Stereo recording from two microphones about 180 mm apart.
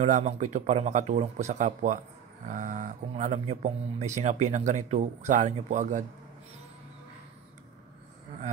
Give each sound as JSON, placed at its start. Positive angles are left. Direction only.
{"t": 0.0, "sound": "speech", "side_deg": -40}